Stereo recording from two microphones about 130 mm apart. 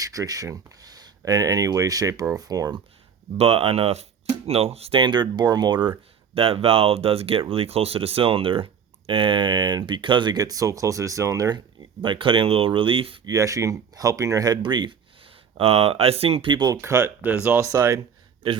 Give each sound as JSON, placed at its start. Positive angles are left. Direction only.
{"t": 0.0, "sound": "speech", "side_deg": -25}
{"t": 3.3, "sound": "speech", "side_deg": -50}
{"t": 6.3, "sound": "speech", "side_deg": -45}
{"t": 13.2, "sound": "speech", "side_deg": -25}
{"t": 16.8, "sound": "speech", "side_deg": -20}
{"t": 17.7, "sound": "speech", "side_deg": -25}